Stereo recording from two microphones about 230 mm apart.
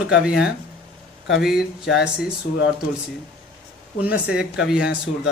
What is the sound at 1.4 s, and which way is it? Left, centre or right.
Speech, centre.